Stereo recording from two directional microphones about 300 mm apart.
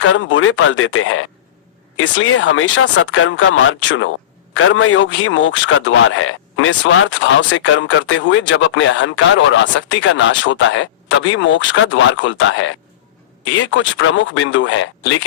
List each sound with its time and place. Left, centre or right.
0.0 s a man's voice: left